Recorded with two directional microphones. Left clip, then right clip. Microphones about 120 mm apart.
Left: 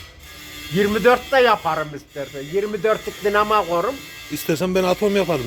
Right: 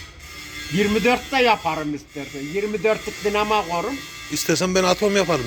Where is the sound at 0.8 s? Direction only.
35° left (ahead or behind).